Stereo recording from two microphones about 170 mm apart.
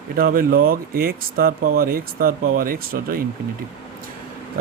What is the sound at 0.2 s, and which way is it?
Speech, 60° right (ahead or behind).